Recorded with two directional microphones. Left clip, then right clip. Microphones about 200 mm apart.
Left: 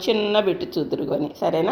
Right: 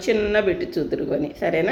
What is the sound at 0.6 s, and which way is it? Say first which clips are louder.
Speech: right 1 dB; 20° left (ahead or behind).